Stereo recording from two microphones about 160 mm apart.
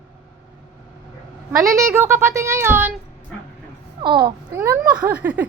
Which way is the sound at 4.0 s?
30° right (ahead or behind).